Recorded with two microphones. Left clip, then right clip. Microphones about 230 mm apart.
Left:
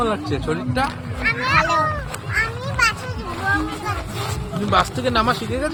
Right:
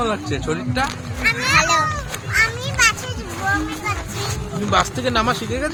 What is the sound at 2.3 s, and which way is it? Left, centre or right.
Children playing, right.